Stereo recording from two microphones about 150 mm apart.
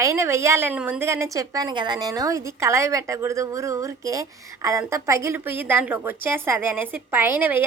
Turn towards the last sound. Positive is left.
turn(degrees=-15)  # may be behind; listen again after turning